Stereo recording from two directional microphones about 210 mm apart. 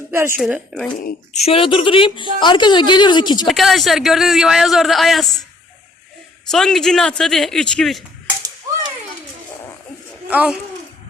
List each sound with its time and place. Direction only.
0.1 s a woman's voice: 10° right (ahead or behind)
0.3 s a man's voice: centre (ahead or behind)
1.0 s speech: 30° left (ahead or behind)
3.4 s a man's voice: centre (ahead or behind)
6.5 s a man's voice: centre (ahead or behind)
8.7 s a sound: 15° right (ahead or behind)
10.2 s a child's voice: 5° right (ahead or behind)